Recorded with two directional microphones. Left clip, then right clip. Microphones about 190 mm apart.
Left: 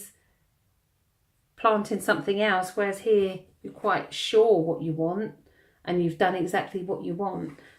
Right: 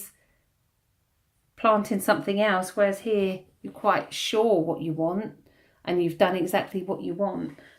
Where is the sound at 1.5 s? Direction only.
40° right (ahead or behind).